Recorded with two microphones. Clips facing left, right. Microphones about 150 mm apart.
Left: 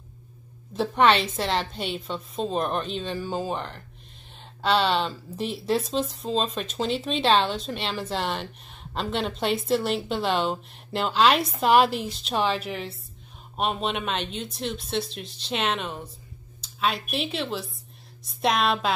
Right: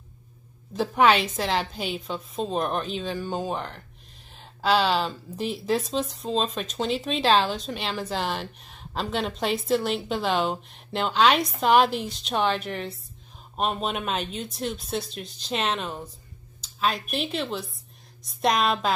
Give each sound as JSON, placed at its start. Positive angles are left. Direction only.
{"t": 0.7, "sound": "speech", "side_deg": 0}